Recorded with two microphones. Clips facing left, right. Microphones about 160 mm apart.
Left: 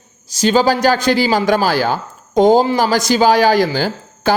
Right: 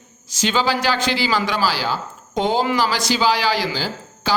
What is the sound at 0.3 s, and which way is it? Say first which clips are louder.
A man's voice: left 7 dB; 40° left (ahead or behind).